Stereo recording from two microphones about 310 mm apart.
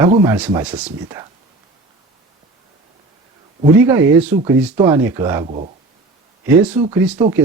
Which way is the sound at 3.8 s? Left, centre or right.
Centre.